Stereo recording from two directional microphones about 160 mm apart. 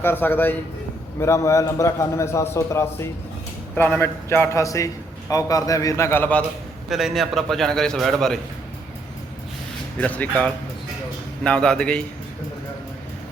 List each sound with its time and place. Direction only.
0.0 s a man's voice: 15° left (ahead or behind)
6.8 s a man's voice: centre (ahead or behind)
10.0 s a man's voice: 10° left (ahead or behind)